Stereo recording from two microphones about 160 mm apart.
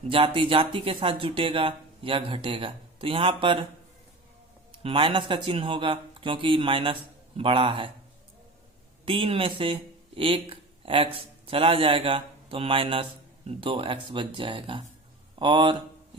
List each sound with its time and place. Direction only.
0.1 s speech: 35° right (ahead or behind)
4.8 s speech: 35° right (ahead or behind)
9.0 s a man's voice: 35° right (ahead or behind)